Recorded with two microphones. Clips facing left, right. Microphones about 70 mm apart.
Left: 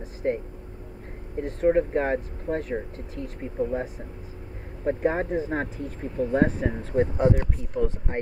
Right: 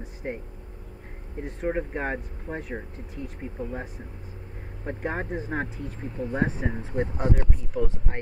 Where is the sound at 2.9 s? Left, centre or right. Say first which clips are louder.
Left 2 dB; left.